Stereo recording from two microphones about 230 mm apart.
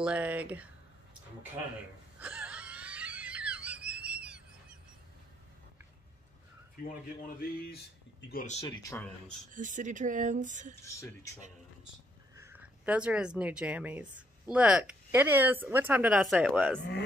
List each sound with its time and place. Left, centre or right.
0.0 s speech: centre
2.1 s wail: centre
7.3 s speech: left
9.5 s speech: right
12.5 s speech: centre